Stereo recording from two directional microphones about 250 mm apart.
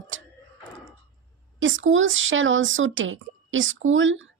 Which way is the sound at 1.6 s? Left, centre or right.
Right.